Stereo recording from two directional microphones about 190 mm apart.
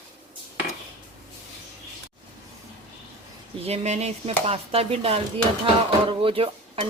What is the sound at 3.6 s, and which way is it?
Speech, 35° right (ahead or behind).